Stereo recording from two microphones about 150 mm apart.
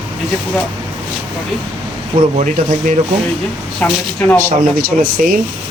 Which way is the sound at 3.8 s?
10° left (ahead or behind).